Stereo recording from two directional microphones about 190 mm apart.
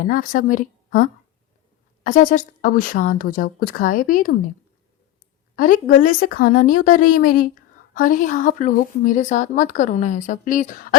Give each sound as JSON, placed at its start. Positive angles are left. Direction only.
{"t": 0.0, "sound": "speech", "side_deg": 45}
{"t": 2.0, "sound": "speech", "side_deg": 45}
{"t": 5.5, "sound": "speech", "side_deg": 45}